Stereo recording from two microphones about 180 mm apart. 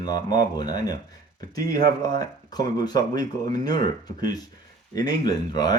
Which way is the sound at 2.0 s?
20° left (ahead or behind).